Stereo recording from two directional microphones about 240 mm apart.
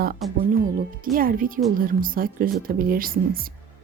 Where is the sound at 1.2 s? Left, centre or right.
Right.